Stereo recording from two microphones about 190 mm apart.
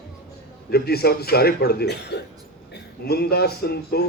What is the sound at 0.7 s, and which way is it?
A man's voice, 55° left (ahead or behind).